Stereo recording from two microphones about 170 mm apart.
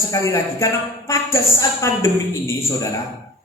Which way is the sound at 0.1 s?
20° left (ahead or behind).